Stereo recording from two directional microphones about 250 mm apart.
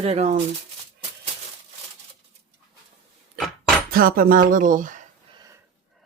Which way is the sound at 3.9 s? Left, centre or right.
Right.